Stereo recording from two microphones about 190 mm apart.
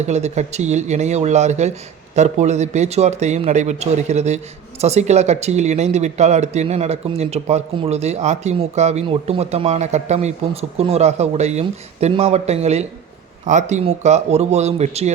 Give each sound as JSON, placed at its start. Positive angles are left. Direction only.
{"t": 0.0, "sound": "speech", "side_deg": -35}